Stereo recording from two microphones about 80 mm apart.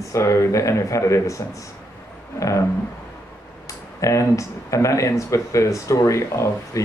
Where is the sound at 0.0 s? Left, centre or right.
Left.